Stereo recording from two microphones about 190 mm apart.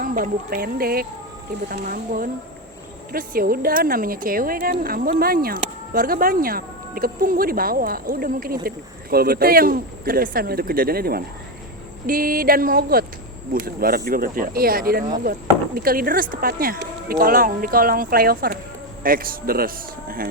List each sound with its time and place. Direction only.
0.0 s speech: 50° right (ahead or behind)